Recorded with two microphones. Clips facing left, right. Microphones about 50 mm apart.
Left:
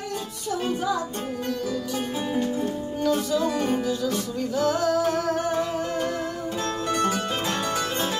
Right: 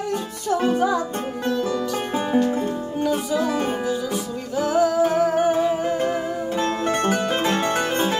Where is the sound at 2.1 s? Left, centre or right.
Right.